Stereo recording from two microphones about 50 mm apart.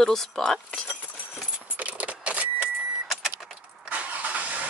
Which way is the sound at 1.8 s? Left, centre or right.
Right.